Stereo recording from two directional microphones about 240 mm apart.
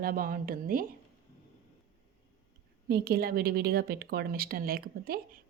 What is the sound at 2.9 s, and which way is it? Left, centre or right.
Speech, right.